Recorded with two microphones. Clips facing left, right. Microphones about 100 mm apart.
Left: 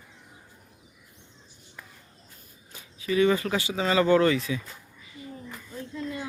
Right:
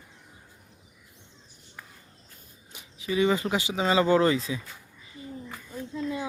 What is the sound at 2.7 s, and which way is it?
Speech, 20° right (ahead or behind).